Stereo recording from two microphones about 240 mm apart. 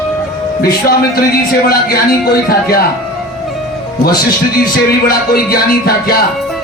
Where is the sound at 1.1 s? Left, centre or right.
Left.